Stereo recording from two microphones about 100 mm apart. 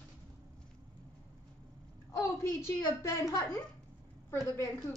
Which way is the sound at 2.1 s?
30° left (ahead or behind).